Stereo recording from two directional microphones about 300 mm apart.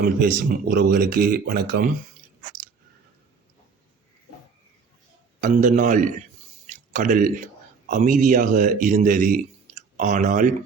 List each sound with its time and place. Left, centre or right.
0.0 s speech: right
5.4 s speech: right
6.7 s a sound: right
7.9 s a man's voice: right